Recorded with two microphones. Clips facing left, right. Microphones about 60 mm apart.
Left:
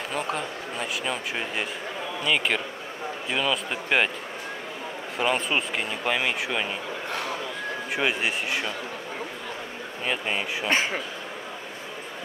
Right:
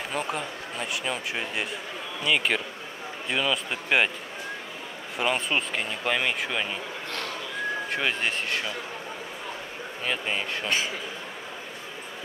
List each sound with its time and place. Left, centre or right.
0.1 s speech: centre
5.1 s speech: centre
10.0 s speech: centre
10.7 s a man's voice: left